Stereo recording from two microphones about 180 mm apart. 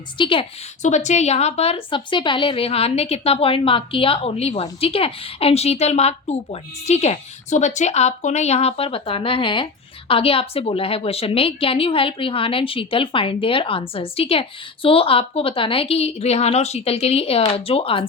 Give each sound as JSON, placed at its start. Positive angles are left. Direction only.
{"t": 0.2, "sound": "a woman's voice", "side_deg": 30}
{"t": 0.8, "sound": "a woman's voice", "side_deg": 40}